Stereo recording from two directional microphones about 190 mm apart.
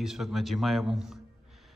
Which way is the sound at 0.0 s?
Centre (ahead or behind).